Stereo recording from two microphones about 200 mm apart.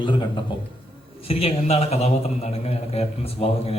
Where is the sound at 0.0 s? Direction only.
25° left (ahead or behind).